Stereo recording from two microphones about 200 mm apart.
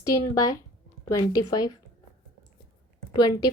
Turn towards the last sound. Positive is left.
turn(degrees=20)  # may be behind; listen again after turning